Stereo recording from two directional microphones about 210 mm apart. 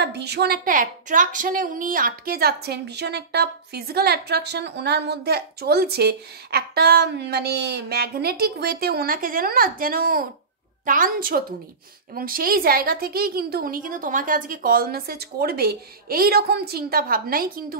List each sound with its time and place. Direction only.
0.0 s a woman's voice: 50° right (ahead or behind)